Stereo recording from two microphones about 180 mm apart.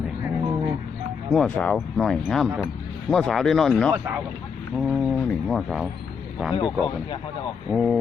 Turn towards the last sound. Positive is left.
turn(degrees=0)  # may be behind; listen again after turning